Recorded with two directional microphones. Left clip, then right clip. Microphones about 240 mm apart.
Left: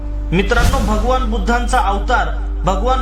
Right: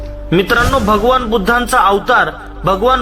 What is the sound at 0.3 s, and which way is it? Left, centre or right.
A man's voice, right.